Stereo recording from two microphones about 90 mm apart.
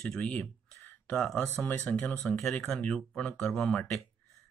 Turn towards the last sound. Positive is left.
turn(degrees=10)  # may be behind; listen again after turning